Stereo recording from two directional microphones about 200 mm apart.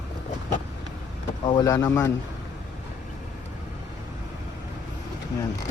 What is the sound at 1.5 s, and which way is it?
Speech, 20° left (ahead or behind).